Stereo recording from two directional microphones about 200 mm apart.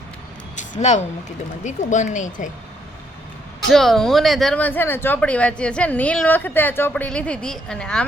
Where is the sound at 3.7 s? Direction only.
Centre (ahead or behind).